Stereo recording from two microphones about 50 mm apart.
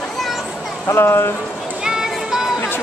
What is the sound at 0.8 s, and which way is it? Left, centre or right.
Speech, left.